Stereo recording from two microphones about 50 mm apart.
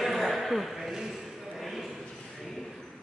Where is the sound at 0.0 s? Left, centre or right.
Centre.